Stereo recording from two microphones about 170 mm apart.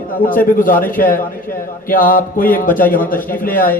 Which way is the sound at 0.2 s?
55° left (ahead or behind).